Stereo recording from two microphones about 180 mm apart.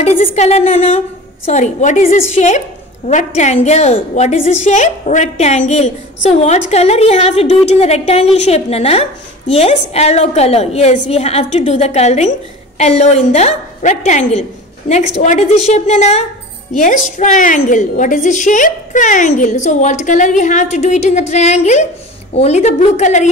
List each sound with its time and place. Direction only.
0.3 s a woman's voice: 35° left (ahead or behind)